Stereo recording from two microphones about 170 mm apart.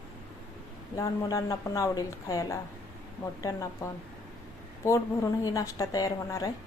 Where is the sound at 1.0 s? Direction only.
20° left (ahead or behind).